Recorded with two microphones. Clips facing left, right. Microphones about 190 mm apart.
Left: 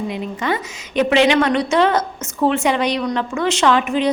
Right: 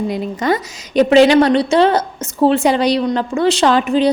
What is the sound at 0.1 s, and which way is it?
A woman's voice, 40° right (ahead or behind).